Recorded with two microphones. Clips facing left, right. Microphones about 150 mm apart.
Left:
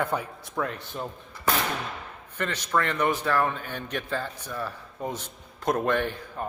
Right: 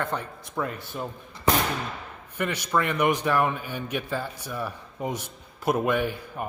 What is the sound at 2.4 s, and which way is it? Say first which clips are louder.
A man's voice: right 1 dB; 10° right (ahead or behind).